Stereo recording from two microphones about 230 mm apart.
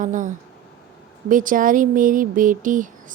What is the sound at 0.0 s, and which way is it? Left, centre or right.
Speech, right.